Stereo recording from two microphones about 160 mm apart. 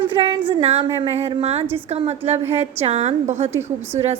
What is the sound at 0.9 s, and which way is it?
A woman's voice, 40° right (ahead or behind).